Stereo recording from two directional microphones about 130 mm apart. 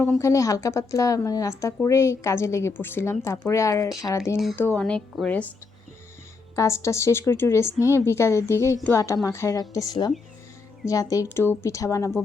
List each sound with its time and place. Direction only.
0.2 s speech: 25° left (ahead or behind)
6.6 s speech: 20° left (ahead or behind)